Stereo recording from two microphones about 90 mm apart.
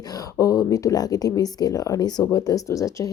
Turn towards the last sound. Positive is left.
turn(degrees=40)  # may be behind; listen again after turning